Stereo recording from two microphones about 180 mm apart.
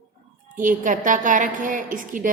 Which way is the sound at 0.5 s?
45° right (ahead or behind).